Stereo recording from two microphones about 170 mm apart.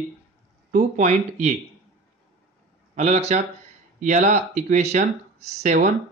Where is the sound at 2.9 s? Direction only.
40° right (ahead or behind).